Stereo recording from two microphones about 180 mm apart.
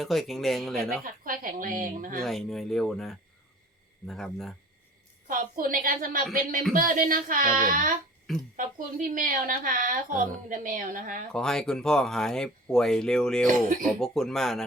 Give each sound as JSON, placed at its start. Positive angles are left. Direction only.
{"t": 0.0, "sound": "speech", "side_deg": 0}
{"t": 1.0, "sound": "a woman's voice", "side_deg": -50}
{"t": 2.2, "sound": "speech", "side_deg": 0}
{"t": 5.3, "sound": "a woman's voice", "side_deg": -50}
{"t": 11.3, "sound": "speech", "side_deg": 5}